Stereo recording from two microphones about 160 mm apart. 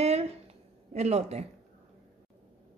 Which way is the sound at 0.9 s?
45° right (ahead or behind).